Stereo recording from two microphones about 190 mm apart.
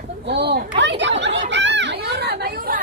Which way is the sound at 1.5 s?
70° right (ahead or behind).